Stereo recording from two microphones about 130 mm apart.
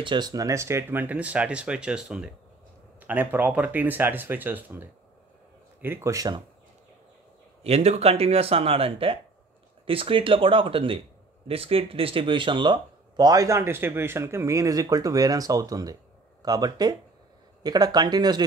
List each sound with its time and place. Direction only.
0.0 s speech: 35° right (ahead or behind)
7.6 s speech: 55° right (ahead or behind); by 18.4 s 30° right (ahead or behind)